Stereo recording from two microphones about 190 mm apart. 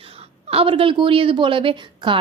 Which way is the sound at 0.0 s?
30° right (ahead or behind).